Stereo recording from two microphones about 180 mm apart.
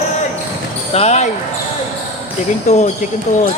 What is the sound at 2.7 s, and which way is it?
Speech, 40° left (ahead or behind).